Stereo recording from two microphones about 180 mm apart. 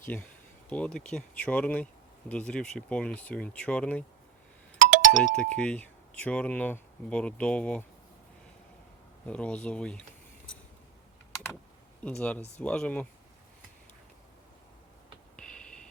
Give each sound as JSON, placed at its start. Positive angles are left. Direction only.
{"t": 0.1, "sound": "speech", "side_deg": 5}
{"t": 4.8, "sound": "doorbell", "side_deg": -45}
{"t": 5.2, "sound": "speech", "side_deg": 5}
{"t": 9.2, "sound": "speech", "side_deg": 5}
{"t": 12.0, "sound": "speech", "side_deg": 5}
{"t": 15.4, "sound": "a sound", "side_deg": 5}